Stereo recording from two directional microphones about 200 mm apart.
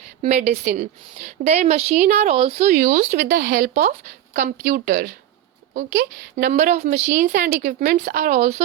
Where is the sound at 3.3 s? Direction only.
50° right (ahead or behind).